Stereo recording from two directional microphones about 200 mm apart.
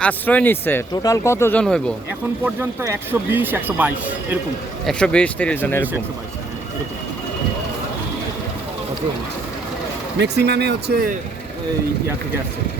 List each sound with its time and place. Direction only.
0.0 s speech: 5° left (ahead or behind)
2.4 s speech: 15° right (ahead or behind)
4.9 s speech: 5° left (ahead or behind)
10.2 s speech: 55° right (ahead or behind)